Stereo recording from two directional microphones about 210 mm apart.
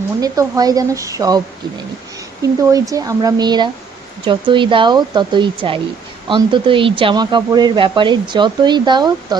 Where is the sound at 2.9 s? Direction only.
15° right (ahead or behind).